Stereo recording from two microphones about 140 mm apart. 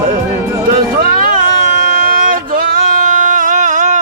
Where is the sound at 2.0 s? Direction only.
80° right.